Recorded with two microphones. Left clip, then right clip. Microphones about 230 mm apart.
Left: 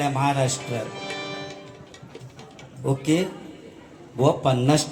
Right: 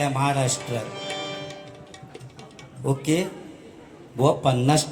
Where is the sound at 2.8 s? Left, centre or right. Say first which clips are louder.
Even; right.